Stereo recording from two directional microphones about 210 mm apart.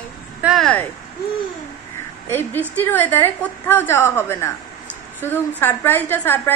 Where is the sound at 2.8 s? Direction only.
10° left (ahead or behind).